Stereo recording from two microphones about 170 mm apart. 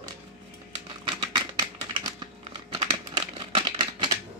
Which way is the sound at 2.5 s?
30° right (ahead or behind).